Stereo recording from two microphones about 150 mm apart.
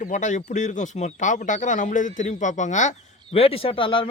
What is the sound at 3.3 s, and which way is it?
Speech, 40° left (ahead or behind).